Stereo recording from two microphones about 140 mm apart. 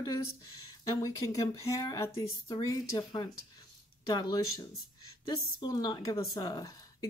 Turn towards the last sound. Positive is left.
turn(degrees=30)  # may be behind; listen again after turning